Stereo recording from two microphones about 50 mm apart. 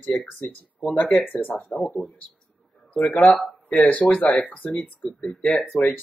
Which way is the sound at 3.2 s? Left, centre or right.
Centre.